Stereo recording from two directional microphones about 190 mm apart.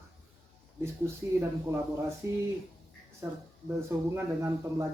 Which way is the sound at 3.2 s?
15° right (ahead or behind).